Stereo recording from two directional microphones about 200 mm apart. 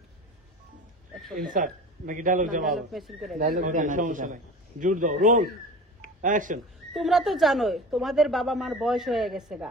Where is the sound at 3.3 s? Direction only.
45° right (ahead or behind).